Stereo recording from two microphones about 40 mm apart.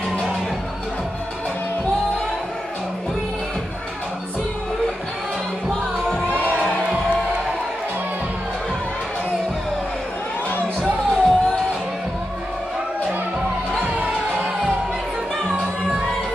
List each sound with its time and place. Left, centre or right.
11.1 s music: centre
13.8 s music: right